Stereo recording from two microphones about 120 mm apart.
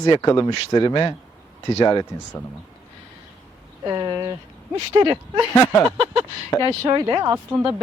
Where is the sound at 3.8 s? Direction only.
35° right (ahead or behind).